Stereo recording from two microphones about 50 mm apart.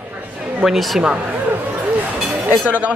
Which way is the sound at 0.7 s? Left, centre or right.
Centre.